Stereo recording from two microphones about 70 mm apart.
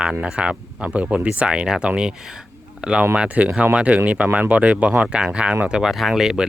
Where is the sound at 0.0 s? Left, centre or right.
Centre.